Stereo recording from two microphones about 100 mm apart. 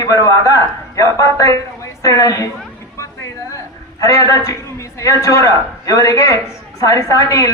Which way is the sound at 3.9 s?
35° left (ahead or behind).